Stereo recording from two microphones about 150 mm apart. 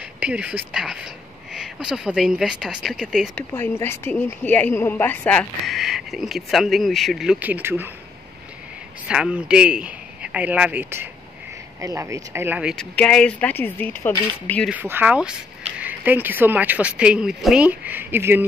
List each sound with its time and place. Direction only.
0.2 s speech: 10° right (ahead or behind)
3.3 s a woman's voice: 10° left (ahead or behind)
5.7 s speech: centre (ahead or behind)
9.0 s a man's voice: 5° right (ahead or behind)
12.7 s a woman's voice: 5° left (ahead or behind)
14.7 s a woman's voice: 10° right (ahead or behind)